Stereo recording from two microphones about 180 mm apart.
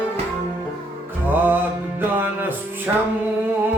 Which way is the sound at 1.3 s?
10° right (ahead or behind).